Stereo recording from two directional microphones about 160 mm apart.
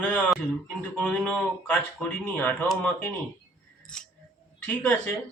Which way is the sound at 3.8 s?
5° left (ahead or behind).